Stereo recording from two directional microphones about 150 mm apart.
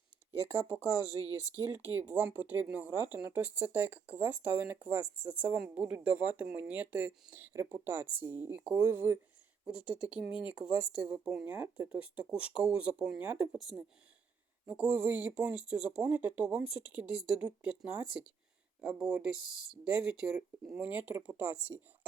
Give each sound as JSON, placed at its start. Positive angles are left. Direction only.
{"t": 0.4, "sound": "speech", "side_deg": -10}
{"t": 0.7, "sound": "speech", "side_deg": 25}
{"t": 1.8, "sound": "speech", "side_deg": -10}